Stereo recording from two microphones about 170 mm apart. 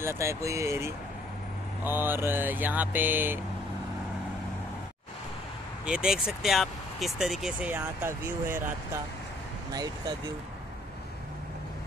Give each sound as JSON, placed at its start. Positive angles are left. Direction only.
{"t": 0.0, "sound": "vehicle", "side_deg": -15}
{"t": 5.9, "sound": "speech", "side_deg": -5}